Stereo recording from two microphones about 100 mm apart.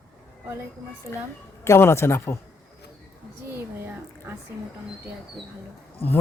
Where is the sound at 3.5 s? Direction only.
25° right (ahead or behind).